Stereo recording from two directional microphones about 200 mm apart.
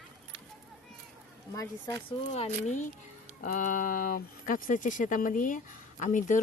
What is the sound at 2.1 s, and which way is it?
Speech, 30° left (ahead or behind).